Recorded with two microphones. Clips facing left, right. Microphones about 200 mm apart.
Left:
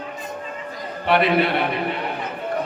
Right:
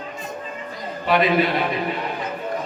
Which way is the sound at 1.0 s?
60° left (ahead or behind).